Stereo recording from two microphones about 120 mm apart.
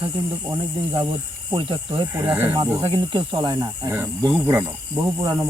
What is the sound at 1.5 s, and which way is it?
Speech, 40° right (ahead or behind).